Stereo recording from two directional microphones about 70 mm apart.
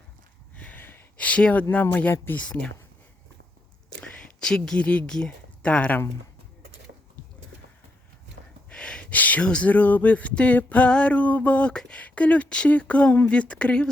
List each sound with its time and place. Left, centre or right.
0.5 s a sound: centre
1.7 s speech: left
4.4 s speech: centre
8.7 s speech: centre